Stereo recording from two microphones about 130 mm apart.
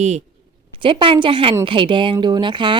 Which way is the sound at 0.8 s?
40° right (ahead or behind).